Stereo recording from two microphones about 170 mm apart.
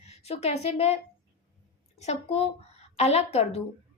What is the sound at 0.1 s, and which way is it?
Speech, 40° left (ahead or behind).